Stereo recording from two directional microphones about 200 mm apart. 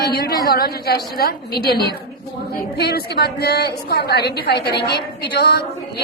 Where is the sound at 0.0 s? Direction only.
50° left (ahead or behind).